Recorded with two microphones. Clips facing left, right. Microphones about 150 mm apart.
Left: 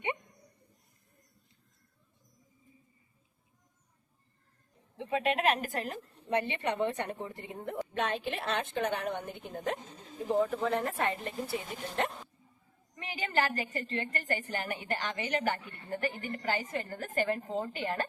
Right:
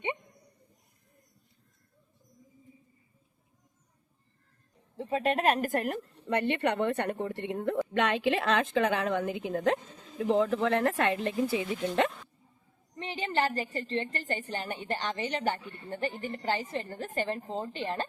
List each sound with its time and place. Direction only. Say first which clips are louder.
4.9 s a woman's voice: right 2 dB; 40° right (ahead or behind); by 12.1 s 90° right
13.0 s a woman's voice: right 2 dB; 30° right (ahead or behind)